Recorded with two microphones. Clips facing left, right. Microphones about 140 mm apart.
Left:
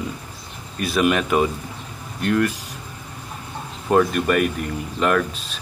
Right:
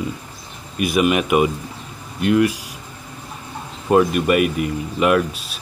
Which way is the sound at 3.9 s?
10° right (ahead or behind).